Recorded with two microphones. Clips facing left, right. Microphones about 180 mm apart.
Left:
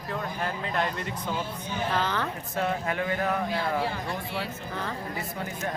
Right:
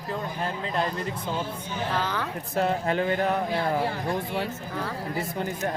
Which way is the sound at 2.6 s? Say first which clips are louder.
Right 4 dB; 30° right (ahead or behind).